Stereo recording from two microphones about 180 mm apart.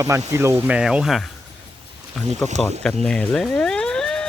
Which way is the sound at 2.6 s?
5° left (ahead or behind).